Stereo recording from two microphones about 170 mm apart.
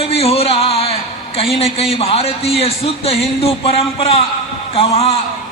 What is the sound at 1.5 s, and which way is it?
A man's voice, 35° left (ahead or behind).